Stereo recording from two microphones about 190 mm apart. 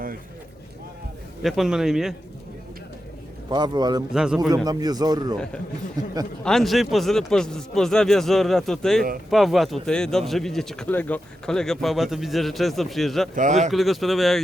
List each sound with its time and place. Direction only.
1.4 s speech: centre (ahead or behind)
3.5 s a man's voice: 20° right (ahead or behind)
4.1 s speech: 5° right (ahead or behind)
4.4 s a man's voice: 20° right (ahead or behind)
6.4 s speech: centre (ahead or behind)
13.3 s speech: 40° right (ahead or behind)
13.7 s speech: centre (ahead or behind)